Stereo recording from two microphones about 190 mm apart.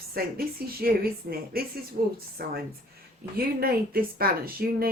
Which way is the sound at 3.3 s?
50° right (ahead or behind).